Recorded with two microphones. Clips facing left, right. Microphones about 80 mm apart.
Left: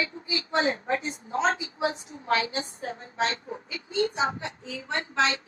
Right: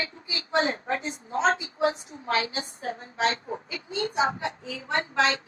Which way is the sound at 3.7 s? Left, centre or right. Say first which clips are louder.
Left 2 dB; right.